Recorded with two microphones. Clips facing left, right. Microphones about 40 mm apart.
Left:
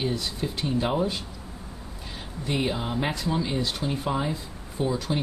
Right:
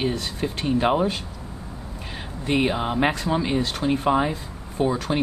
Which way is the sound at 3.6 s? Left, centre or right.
Right.